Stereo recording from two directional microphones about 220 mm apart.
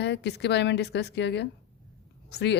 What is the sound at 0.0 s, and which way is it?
A woman's voice, 50° left (ahead or behind).